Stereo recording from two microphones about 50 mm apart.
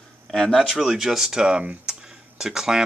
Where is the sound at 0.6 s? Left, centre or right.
Centre.